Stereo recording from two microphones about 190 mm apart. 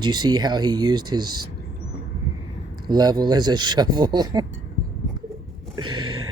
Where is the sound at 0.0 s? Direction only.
20° right (ahead or behind).